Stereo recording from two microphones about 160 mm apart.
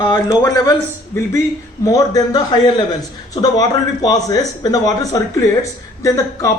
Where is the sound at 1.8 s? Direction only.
20° left (ahead or behind).